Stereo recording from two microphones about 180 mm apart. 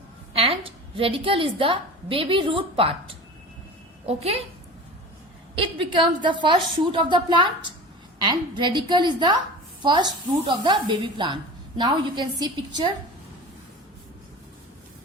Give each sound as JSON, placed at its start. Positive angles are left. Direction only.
{"t": 0.3, "sound": "a woman's voice", "side_deg": -30}
{"t": 4.0, "sound": "a woman's voice", "side_deg": -35}
{"t": 5.5, "sound": "a woman's voice", "side_deg": -30}